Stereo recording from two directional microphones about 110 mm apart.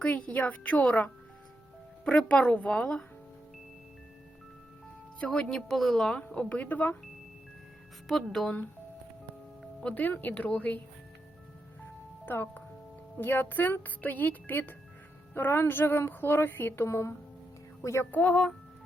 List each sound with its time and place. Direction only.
0.0 s speech: 15° left (ahead or behind)
5.2 s speech: 5° left (ahead or behind)
8.0 s speech: centre (ahead or behind)
9.8 s speech: 15° left (ahead or behind)
12.2 s speech: 20° left (ahead or behind)